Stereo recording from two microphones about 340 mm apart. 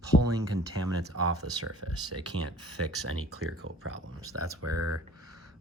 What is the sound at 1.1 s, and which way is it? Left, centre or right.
Speech, right.